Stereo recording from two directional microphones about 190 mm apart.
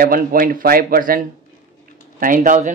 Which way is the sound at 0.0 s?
50° right (ahead or behind).